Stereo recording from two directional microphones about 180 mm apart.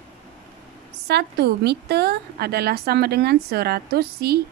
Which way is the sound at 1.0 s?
65° right (ahead or behind).